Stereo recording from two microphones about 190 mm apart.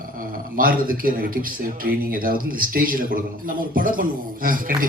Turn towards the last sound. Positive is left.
turn(degrees=-50)  # may be behind; listen again after turning